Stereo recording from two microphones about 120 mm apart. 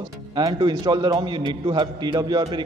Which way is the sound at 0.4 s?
35° right (ahead or behind).